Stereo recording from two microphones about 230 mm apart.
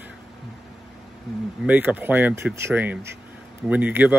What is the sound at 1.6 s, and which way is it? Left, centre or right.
Speech, centre.